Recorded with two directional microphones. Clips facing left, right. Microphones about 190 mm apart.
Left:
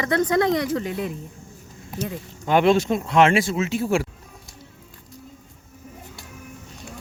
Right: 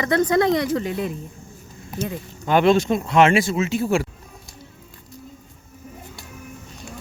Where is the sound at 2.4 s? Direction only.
15° left (ahead or behind).